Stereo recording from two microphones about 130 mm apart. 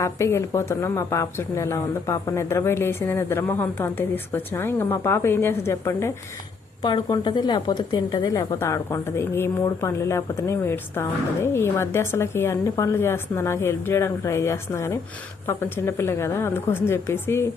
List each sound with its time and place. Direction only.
0.0 s a woman's voice: 20° left (ahead or behind)
6.8 s a woman's voice: 35° left (ahead or behind); by 17.4 s 20° left (ahead or behind)